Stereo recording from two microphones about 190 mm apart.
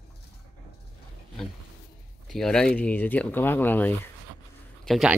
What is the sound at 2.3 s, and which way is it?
Speech, centre (ahead or behind).